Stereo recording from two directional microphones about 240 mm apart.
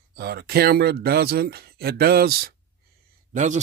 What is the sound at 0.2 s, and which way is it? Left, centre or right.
Speech, right.